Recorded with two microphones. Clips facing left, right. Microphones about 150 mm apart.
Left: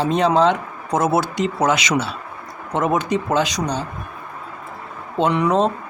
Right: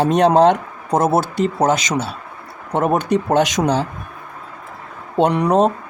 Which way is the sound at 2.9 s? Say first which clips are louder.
Right 5 dB; 60° right (ahead or behind).